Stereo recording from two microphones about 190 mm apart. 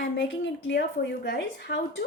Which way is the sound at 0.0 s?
75° left (ahead or behind).